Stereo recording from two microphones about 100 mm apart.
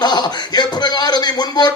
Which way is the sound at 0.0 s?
45° left (ahead or behind).